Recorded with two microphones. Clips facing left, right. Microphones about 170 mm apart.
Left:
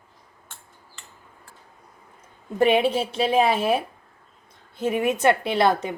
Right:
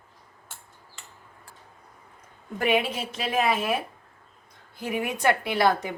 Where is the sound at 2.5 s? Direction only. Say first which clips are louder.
Left 6 dB; 30° left (ahead or behind).